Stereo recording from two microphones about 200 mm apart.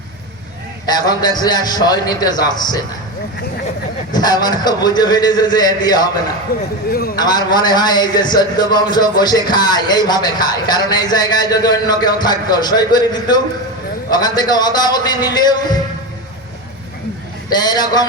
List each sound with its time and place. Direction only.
0.9 s a man's voice: 20° left (ahead or behind)
4.1 s a man's voice: 20° left (ahead or behind)
6.5 s speech: 45° left (ahead or behind)
7.2 s a man's voice: 20° left (ahead or behind)
17.5 s a man's voice: 20° left (ahead or behind)